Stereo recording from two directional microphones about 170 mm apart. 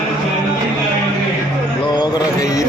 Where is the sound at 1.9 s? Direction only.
25° left (ahead or behind).